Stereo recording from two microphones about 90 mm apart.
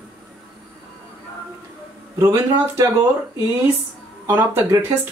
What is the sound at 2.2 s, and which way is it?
Speech, 35° right (ahead or behind).